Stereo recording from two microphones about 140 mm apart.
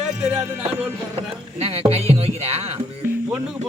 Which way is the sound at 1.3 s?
45° right (ahead or behind).